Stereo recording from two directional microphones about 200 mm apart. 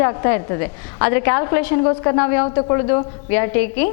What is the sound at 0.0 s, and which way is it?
A woman's voice, 15° left (ahead or behind).